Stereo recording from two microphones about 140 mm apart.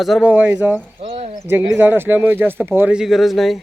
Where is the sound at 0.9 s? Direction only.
45° right (ahead or behind).